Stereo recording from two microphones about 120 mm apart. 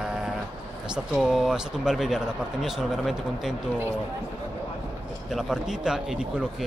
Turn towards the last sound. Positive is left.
turn(degrees=-5)  # may be behind; listen again after turning